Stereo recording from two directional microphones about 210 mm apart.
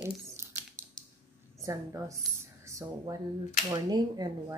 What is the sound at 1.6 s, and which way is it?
A woman's voice, 15° right (ahead or behind).